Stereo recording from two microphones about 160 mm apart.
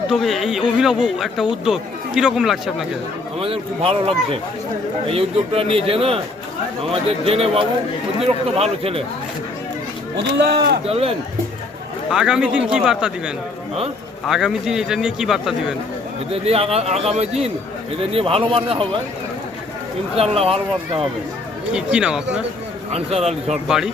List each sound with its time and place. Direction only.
0.1 s speech: centre (ahead or behind)
3.4 s a man's voice: 35° right (ahead or behind)
10.4 s speech: 90° right
10.8 s a man's voice: 40° right (ahead or behind)
12.1 s speech: 5° right (ahead or behind)
16.3 s a man's voice: 35° right (ahead or behind)
20.1 s a man's voice: 35° right (ahead or behind)
21.7 s speech: 5° right (ahead or behind)
22.9 s a man's voice: 40° right (ahead or behind)
23.6 s speech: 5° right (ahead or behind)